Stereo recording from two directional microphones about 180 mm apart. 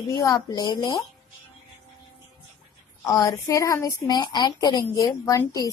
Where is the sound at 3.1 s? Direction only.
15° left (ahead or behind).